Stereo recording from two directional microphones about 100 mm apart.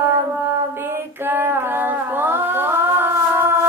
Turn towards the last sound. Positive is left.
turn(degrees=-25)  # may be behind; listen again after turning